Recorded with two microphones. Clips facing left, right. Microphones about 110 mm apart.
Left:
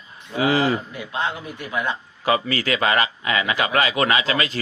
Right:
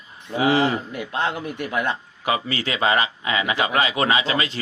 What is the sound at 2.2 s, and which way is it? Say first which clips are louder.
A man's voice: left 3 dB; 20° right (ahead or behind).